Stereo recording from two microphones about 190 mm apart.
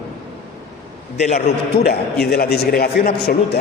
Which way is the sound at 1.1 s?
40° left (ahead or behind).